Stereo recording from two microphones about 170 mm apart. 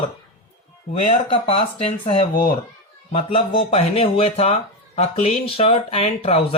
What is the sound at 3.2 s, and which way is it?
Speech, 35° left (ahead or behind).